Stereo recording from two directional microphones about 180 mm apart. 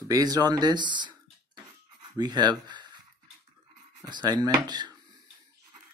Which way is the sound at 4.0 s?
25° right (ahead or behind).